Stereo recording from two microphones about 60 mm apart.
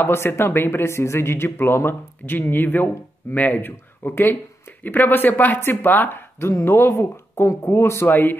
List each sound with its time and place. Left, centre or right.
0.0 s speech: left
6.9 s speech: left